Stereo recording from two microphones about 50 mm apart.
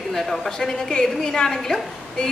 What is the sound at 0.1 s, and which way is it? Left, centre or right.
A woman's voice, centre.